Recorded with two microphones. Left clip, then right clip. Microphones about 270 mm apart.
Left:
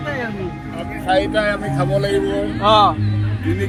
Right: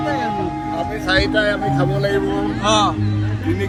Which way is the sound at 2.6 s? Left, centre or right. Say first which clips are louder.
Left 4 dB; centre.